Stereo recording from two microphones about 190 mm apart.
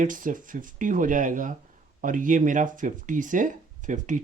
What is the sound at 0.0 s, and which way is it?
Speech, 45° right (ahead or behind).